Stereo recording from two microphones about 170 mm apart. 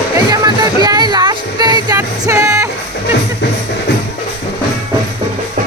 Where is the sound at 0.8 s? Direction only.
25° right (ahead or behind).